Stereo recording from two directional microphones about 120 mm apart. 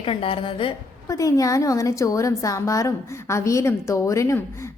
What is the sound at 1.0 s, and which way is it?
A woman's voice, 30° left (ahead or behind).